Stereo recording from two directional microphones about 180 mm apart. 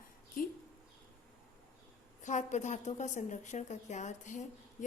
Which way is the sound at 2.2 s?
40° left (ahead or behind).